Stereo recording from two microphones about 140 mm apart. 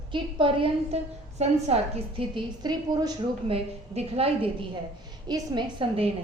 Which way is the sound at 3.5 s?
45° right (ahead or behind).